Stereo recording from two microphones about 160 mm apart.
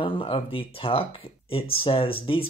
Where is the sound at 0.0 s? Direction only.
35° left (ahead or behind).